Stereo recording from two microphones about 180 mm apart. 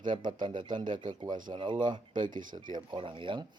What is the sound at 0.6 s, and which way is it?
Speech, 45° right (ahead or behind).